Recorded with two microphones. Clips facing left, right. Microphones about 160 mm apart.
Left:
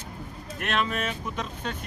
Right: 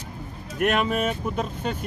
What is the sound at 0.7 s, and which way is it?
Speech, 45° right (ahead or behind).